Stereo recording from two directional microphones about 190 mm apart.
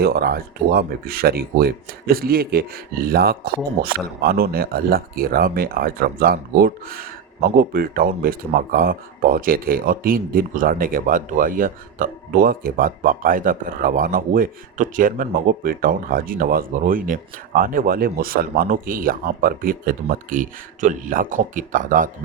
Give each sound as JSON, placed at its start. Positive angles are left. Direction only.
{"t": 0.0, "sound": "speech", "side_deg": -55}